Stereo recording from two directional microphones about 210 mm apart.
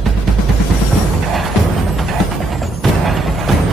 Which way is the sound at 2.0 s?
Centre (ahead or behind).